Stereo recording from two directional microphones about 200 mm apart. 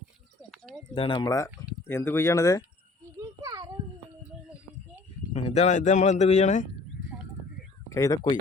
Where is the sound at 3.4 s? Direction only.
15° right (ahead or behind).